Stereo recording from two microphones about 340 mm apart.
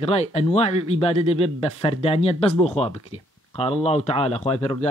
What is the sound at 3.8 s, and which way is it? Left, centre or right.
Speech, centre.